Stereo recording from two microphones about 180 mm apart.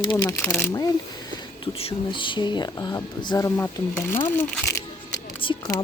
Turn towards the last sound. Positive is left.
turn(degrees=20)  # may be behind; listen again after turning